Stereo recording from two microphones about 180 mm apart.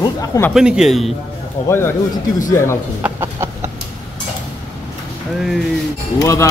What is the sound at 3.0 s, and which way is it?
Chicken, 15° right (ahead or behind).